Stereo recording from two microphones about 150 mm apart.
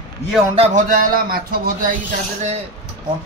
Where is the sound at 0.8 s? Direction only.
70° right (ahead or behind).